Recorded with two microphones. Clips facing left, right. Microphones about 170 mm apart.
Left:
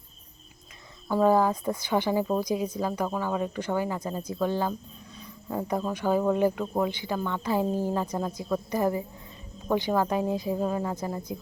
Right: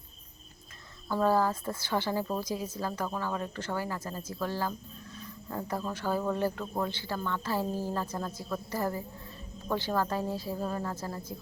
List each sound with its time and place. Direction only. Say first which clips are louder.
1.0 s speech: left 5 dB; 15° left (ahead or behind)